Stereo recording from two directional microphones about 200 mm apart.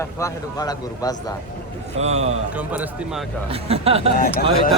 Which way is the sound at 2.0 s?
35° right (ahead or behind).